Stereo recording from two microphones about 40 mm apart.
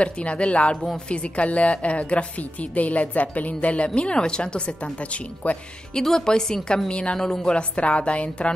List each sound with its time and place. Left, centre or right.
0.0 s a woman's voice: left
5.9 s a woman's voice: centre
6.9 s a woman's voice: left
7.2 s a woman's voice: centre
7.7 s a woman's voice: left